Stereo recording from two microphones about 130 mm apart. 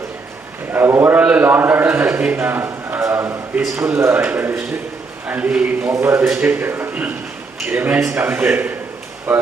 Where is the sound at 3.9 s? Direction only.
20° right (ahead or behind).